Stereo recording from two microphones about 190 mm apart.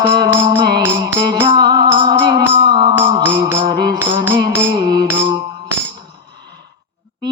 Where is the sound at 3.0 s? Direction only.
15° right (ahead or behind).